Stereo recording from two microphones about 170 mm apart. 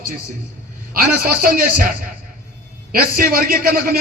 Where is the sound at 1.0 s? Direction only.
60° right (ahead or behind).